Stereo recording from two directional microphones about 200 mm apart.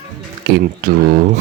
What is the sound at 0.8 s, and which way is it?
Speech, 45° right (ahead or behind).